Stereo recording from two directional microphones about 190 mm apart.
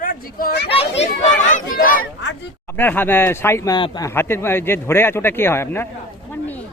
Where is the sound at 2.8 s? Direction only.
10° left (ahead or behind).